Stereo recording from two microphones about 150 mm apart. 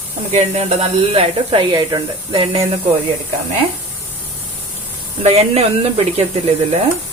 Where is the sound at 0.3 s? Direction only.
45° right (ahead or behind).